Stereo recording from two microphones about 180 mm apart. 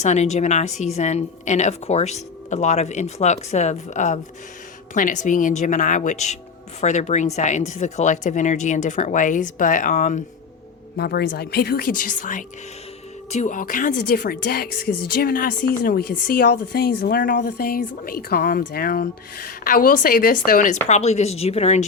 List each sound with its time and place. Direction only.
0.0 s a woman's voice: 40° left (ahead or behind)
10.9 s a woman's voice: 60° left (ahead or behind); by 21.8 s 35° left (ahead or behind)